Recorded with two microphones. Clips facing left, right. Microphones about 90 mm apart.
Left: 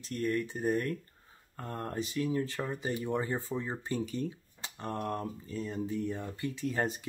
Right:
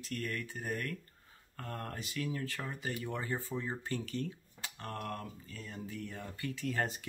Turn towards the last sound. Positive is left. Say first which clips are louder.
# left 3 dB
turn(degrees=20)  # may be behind; listen again after turning